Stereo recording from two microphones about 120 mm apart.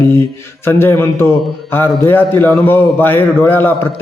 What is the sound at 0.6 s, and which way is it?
A man's voice, 20° left (ahead or behind).